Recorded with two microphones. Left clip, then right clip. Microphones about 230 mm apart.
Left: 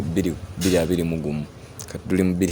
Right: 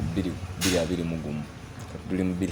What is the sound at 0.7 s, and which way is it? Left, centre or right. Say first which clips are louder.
Speech: left 9 dB; left.